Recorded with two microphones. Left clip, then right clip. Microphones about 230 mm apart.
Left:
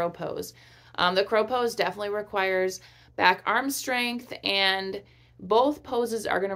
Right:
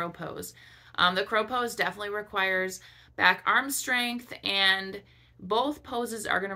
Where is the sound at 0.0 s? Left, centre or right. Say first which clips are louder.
Left 5 dB; centre.